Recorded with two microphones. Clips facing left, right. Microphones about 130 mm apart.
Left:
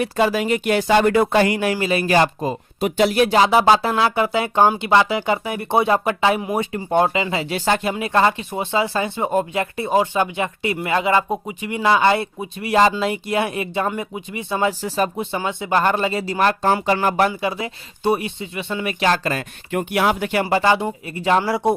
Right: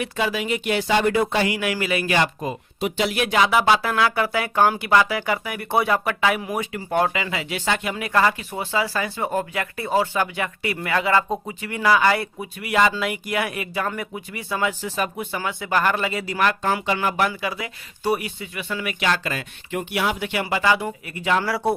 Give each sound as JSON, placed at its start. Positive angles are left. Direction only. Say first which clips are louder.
{"t": 0.0, "sound": "speech", "louder": "left 6 dB", "side_deg": 40}
{"t": 7.9, "sound": "speech", "louder": "left 3 dB", "side_deg": 25}